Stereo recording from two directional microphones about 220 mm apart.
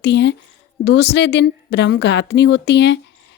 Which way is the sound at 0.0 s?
50° left (ahead or behind).